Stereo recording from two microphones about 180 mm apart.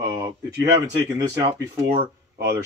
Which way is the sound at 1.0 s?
20° right (ahead or behind).